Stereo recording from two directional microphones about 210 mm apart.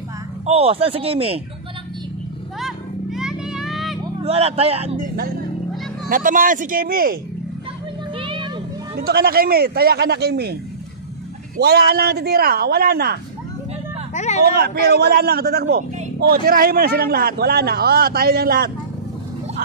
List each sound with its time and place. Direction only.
0.5 s speech: 30° right (ahead or behind)
2.6 s children playing: centre (ahead or behind)
4.2 s speech: 30° right (ahead or behind); by 7.2 s 45° right (ahead or behind)
8.2 s a sound: 25° right (ahead or behind)
8.9 s a man's voice: 45° right (ahead or behind)
14.1 s hubbub: 35° left (ahead or behind)
14.4 s a man's voice: 50° right (ahead or behind)